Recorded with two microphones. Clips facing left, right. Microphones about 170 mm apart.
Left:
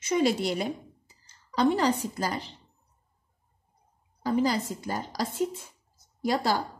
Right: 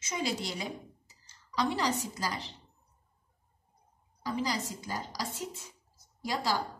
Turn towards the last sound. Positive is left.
turn(degrees=55)  # may be behind; listen again after turning